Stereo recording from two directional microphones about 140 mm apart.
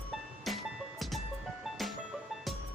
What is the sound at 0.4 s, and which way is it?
Music, centre (ahead or behind).